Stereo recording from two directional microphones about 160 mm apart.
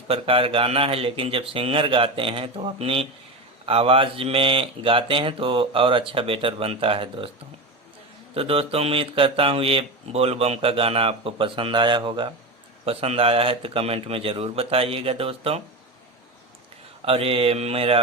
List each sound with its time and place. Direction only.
0.1 s speech: 35° right (ahead or behind)
8.4 s speech: 35° right (ahead or behind)
17.1 s speech: 35° right (ahead or behind)